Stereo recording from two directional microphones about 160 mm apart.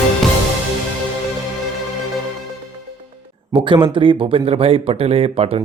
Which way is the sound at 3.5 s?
30° right (ahead or behind).